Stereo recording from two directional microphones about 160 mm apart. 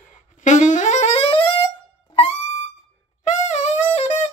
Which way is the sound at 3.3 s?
45° left (ahead or behind).